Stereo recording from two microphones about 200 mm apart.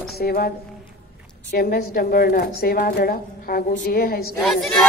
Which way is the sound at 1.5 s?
50° left (ahead or behind).